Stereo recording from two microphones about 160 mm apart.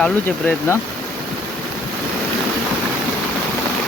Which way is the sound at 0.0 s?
10° left (ahead or behind).